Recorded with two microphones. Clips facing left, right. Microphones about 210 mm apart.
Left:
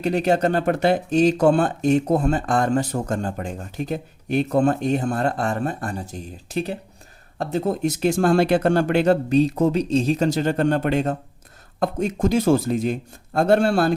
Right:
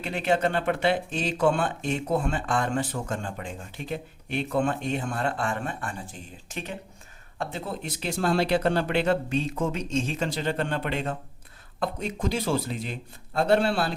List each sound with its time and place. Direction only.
0.0 s speech: 40° left (ahead or behind)